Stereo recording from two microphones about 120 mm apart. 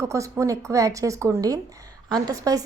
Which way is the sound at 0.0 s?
25° right (ahead or behind).